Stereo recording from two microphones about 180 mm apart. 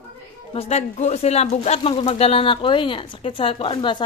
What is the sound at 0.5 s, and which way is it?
Speech, 35° left (ahead or behind).